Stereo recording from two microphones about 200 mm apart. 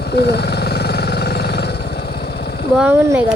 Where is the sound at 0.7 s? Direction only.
55° left (ahead or behind).